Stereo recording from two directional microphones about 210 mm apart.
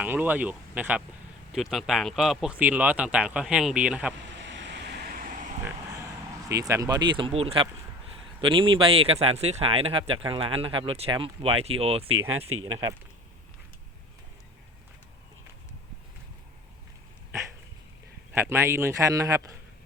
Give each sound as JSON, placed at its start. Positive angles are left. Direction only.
{"t": 0.0, "sound": "a man's voice", "side_deg": -10}
{"t": 4.4, "sound": "vehicle", "side_deg": -60}
{"t": 6.5, "sound": "speech", "side_deg": -15}
{"t": 12.5, "sound": "speech", "side_deg": -85}
{"t": 18.3, "sound": "a man's voice", "side_deg": -15}